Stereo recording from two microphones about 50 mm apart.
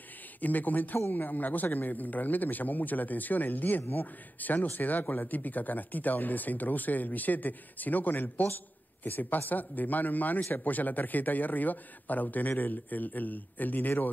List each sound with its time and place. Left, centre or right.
0.4 s speech: left